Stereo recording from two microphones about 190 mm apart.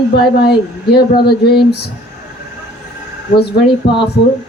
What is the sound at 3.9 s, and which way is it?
Speech, 60° left (ahead or behind).